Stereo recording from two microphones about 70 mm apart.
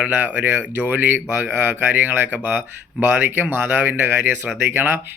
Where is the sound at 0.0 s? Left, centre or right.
Right.